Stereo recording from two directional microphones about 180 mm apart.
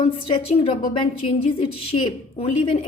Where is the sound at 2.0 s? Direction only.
30° left (ahead or behind).